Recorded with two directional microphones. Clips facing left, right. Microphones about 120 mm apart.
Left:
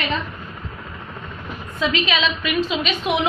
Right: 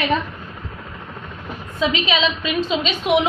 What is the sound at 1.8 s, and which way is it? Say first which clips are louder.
A woman's voice: right 2 dB; 20° right (ahead or behind).